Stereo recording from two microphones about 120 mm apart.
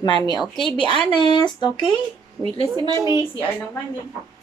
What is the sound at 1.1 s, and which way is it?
Speech, 40° left (ahead or behind).